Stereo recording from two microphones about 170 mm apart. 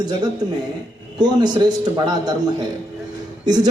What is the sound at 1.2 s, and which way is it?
Speech, 25° right (ahead or behind).